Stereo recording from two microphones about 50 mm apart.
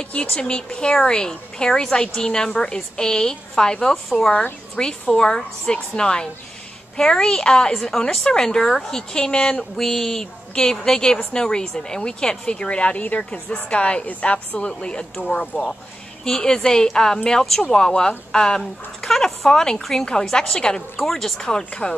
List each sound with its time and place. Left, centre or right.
0.0 s speech: left
4.3 s a woman's voice: left
4.7 s speech: centre
9.8 s a woman's voice: centre